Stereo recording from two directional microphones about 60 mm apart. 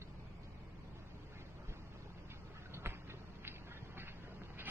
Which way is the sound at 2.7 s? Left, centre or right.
Right.